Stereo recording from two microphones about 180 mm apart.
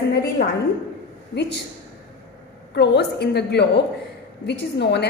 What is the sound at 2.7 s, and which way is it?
A woman's voice, 65° left (ahead or behind).